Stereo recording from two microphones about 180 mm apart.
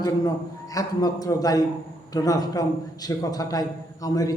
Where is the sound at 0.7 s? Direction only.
20° left (ahead or behind).